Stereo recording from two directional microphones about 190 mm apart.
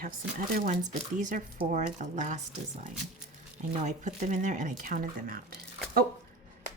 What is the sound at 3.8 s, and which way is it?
Speech, 40° right (ahead or behind).